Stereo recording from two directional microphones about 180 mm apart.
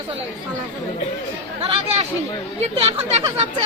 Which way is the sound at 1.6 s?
30° right (ahead or behind).